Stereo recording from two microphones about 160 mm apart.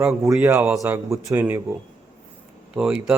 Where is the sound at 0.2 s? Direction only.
15° right (ahead or behind).